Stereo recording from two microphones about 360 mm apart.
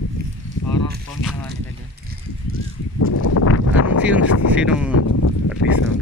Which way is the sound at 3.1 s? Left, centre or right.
Left.